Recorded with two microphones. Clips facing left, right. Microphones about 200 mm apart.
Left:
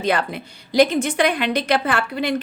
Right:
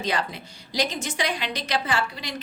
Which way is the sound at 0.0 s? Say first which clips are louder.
Left 6 dB; 55° left (ahead or behind).